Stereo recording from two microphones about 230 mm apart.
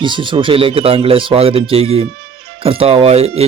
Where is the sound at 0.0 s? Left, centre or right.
Right.